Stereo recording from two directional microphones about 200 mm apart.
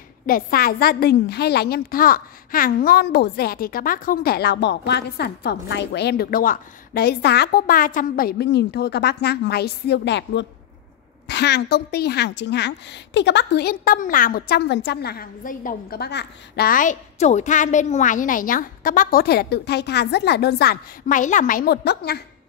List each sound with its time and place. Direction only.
0.3 s a woman's voice: 45° left (ahead or behind)